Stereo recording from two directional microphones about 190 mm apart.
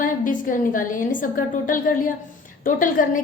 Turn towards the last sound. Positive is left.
turn(degrees=45)  # may be behind; listen again after turning